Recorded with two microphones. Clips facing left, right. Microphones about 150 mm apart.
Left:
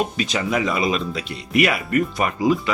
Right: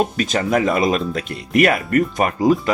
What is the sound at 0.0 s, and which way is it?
Speech, 45° right (ahead or behind).